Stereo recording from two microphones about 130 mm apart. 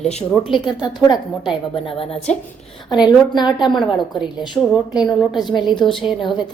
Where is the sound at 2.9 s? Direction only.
35° left (ahead or behind).